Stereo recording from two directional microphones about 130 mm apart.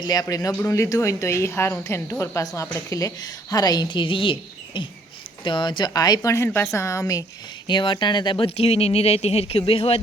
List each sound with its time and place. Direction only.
0.0 s a woman's voice: 30° left (ahead or behind)
7.7 s speech: 40° left (ahead or behind)